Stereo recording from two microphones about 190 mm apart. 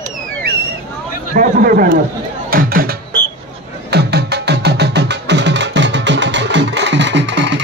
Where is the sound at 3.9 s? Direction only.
60° right (ahead or behind).